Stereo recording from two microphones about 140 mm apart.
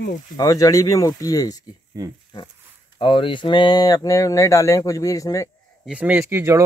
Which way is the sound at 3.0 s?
35° left (ahead or behind).